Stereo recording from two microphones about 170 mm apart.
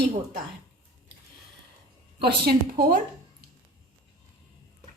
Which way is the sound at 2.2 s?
70° right (ahead or behind).